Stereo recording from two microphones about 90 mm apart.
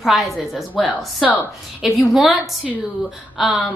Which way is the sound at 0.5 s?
15° left (ahead or behind).